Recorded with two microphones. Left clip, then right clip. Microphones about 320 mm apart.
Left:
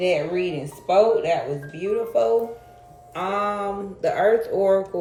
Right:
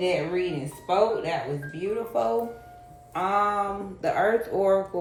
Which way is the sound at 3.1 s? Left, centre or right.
Centre.